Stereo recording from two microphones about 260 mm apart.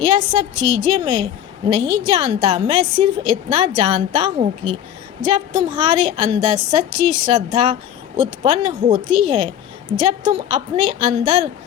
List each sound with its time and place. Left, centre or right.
0.0 s a woman's voice: right